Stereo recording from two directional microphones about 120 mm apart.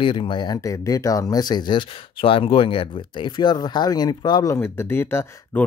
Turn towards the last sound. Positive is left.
turn(degrees=20)  # may be behind; listen again after turning